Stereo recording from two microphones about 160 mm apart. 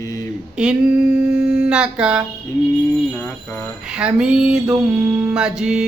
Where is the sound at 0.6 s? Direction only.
5° right (ahead or behind).